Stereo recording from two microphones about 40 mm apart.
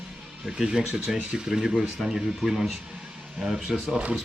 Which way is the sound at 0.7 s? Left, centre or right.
Centre.